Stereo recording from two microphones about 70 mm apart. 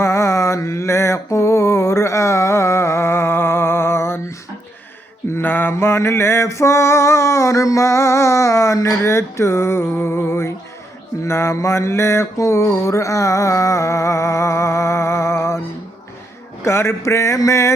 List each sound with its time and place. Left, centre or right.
0.0 s mantra: left
5.7 s a sound: left
11.3 s mantra: left
16.6 s mantra: left